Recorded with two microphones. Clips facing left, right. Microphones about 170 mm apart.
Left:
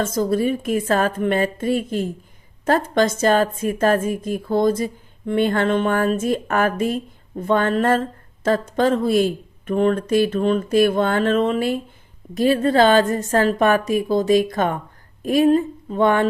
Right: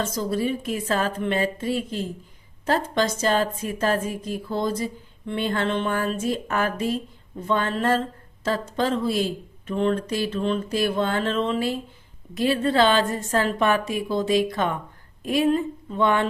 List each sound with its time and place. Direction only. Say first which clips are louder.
0.0 s a woman's voice: left 5 dB; 50° left (ahead or behind)